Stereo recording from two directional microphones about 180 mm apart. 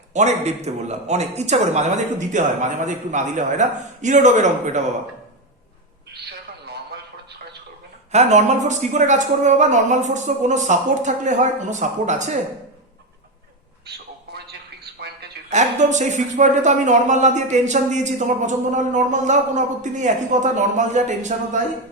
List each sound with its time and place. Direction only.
0.1 s a man's voice: 40° right (ahead or behind)
8.1 s speech: 40° right (ahead or behind)
15.4 s speech: 40° right (ahead or behind)